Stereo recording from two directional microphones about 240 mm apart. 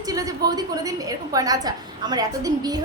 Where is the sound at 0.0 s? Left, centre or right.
Centre.